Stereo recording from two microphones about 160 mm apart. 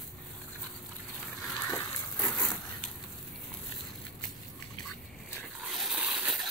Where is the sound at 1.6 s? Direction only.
20° left (ahead or behind).